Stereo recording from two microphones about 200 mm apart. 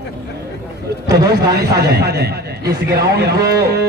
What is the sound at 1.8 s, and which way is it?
A man's voice, 55° right (ahead or behind).